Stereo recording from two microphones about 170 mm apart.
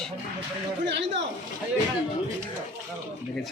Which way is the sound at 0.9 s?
90° right.